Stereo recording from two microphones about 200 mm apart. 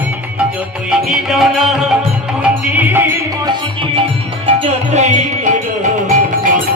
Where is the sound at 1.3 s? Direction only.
Centre (ahead or behind).